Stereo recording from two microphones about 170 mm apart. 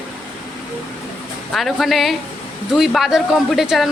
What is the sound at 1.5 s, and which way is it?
Speech, centre (ahead or behind).